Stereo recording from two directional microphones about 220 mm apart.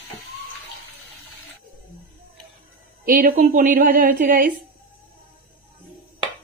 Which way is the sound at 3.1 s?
40° right (ahead or behind).